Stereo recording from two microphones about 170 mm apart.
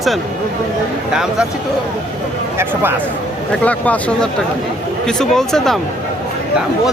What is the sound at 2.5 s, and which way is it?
Speech, 10° right (ahead or behind).